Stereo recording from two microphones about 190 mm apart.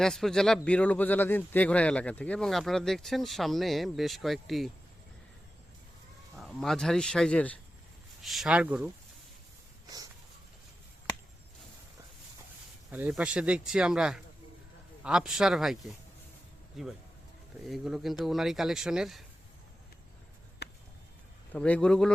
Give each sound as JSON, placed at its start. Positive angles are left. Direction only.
{"t": 0.0, "sound": "speech", "side_deg": 0}
{"t": 6.3, "sound": "speech", "side_deg": 0}
{"t": 12.9, "sound": "speech", "side_deg": -10}
{"t": 20.6, "sound": "a sound", "side_deg": 60}
{"t": 21.5, "sound": "speech", "side_deg": 5}